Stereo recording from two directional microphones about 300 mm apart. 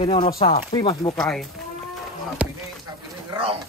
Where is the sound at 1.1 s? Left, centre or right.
Centre.